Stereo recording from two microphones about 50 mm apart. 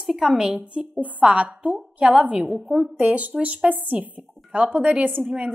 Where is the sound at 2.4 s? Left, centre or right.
Centre.